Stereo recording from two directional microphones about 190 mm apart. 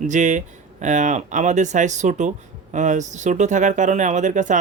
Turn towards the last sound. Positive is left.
turn(degrees=-40)  # may be behind; listen again after turning